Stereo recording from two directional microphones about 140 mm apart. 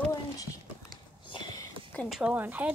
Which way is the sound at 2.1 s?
5° right (ahead or behind).